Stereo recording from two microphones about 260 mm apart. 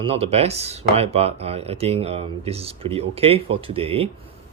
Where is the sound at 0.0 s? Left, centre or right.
Right.